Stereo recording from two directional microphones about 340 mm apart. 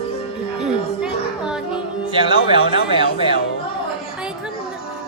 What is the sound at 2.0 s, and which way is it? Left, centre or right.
Speech, centre.